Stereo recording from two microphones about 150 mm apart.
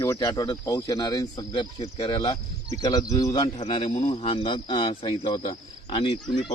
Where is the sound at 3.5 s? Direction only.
45° left (ahead or behind).